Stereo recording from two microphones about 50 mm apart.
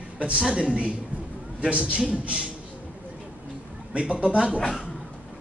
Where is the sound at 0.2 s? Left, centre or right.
Right.